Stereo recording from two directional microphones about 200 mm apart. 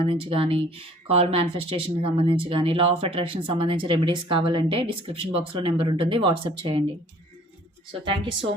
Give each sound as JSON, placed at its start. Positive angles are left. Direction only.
{"t": 0.0, "sound": "speech", "side_deg": -25}
{"t": 8.0, "sound": "speech", "side_deg": -25}